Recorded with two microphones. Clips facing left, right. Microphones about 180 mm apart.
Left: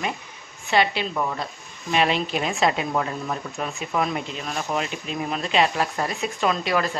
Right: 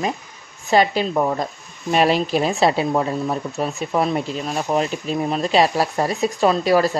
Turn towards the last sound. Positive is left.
turn(degrees=-40)  # may be behind; listen again after turning